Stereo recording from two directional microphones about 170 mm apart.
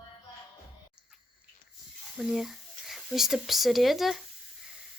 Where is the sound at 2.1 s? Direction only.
Centre (ahead or behind).